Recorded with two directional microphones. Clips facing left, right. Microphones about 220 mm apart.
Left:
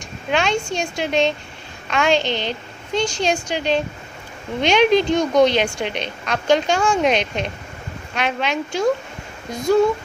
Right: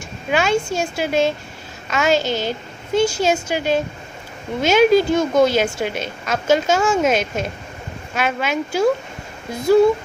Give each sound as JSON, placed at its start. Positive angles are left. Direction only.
{"t": 0.3, "sound": "a woman's voice", "side_deg": -5}
{"t": 2.2, "sound": "a woman's voice", "side_deg": -45}
{"t": 2.9, "sound": "a woman's voice", "side_deg": -5}